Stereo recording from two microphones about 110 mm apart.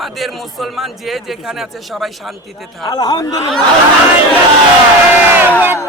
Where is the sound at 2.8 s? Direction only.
35° left (ahead or behind).